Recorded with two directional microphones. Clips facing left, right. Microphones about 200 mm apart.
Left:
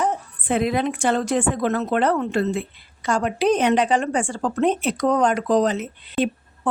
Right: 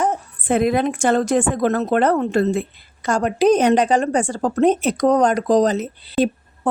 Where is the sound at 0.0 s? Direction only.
45° right (ahead or behind).